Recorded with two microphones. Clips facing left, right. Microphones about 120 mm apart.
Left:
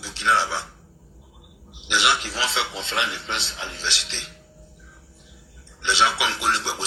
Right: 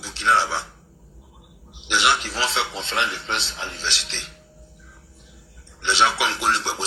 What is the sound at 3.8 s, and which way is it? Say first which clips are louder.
Speech: even; 25° right (ahead or behind).